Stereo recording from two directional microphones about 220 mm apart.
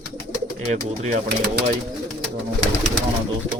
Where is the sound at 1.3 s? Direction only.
50° right (ahead or behind).